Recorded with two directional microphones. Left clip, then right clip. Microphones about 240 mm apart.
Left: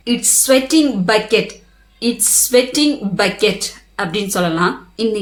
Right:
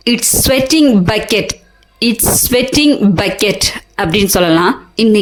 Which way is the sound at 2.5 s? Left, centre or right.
Right.